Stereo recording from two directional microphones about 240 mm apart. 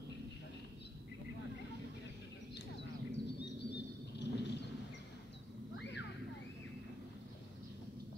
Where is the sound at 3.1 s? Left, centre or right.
Left.